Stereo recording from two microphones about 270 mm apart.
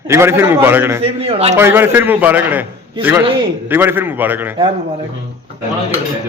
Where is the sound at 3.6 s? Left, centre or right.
Centre.